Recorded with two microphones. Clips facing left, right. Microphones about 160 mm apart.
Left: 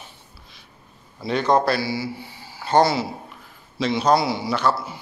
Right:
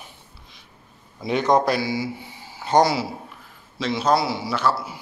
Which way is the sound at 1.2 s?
15° right (ahead or behind).